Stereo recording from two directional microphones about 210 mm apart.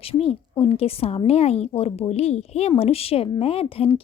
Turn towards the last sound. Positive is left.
turn(degrees=25)  # may be behind; listen again after turning